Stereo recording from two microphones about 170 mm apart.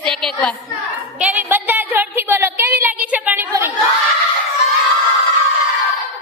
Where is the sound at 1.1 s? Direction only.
10° right (ahead or behind).